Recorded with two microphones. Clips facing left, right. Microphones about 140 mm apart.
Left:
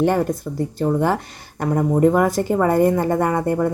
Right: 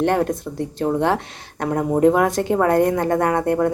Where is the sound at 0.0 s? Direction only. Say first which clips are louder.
Left 1 dB; centre (ahead or behind).